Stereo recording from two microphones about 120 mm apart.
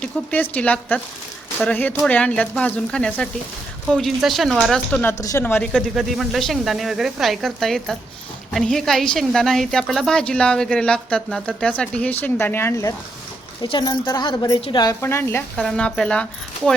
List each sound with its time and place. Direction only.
0.0 s a woman's voice: 15° left (ahead or behind)
5.1 s a woman's voice: 30° left (ahead or behind)
5.4 s a woman's voice: 15° left (ahead or behind)
5.7 s a woman's voice: centre (ahead or behind); by 12.9 s 20° left (ahead or behind)
13.6 s a woman's voice: 40° left (ahead or behind)
15.0 s speech: 20° left (ahead or behind)
15.5 s a woman's voice: 5° left (ahead or behind)